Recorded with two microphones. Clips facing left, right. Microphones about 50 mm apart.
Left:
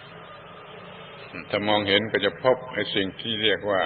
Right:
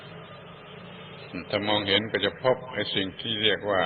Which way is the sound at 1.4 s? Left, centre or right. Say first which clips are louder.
Left 3 dB; centre.